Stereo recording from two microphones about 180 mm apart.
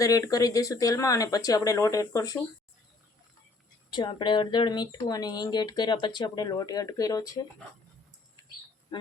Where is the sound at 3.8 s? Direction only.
25° left (ahead or behind).